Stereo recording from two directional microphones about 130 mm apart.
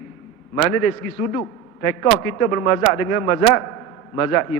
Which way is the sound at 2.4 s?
25° left (ahead or behind).